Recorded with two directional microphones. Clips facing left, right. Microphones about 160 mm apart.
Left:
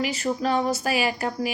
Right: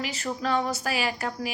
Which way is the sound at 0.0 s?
10° left (ahead or behind).